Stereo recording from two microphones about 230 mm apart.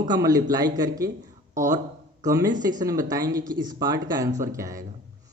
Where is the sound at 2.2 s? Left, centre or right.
Centre.